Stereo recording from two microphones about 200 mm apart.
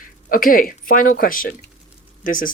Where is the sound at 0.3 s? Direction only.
45° left (ahead or behind).